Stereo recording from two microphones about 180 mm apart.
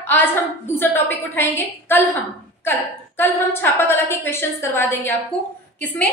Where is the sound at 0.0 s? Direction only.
10° left (ahead or behind).